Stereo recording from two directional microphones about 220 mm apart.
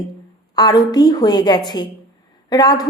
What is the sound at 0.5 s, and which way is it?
A woman's voice, 15° left (ahead or behind).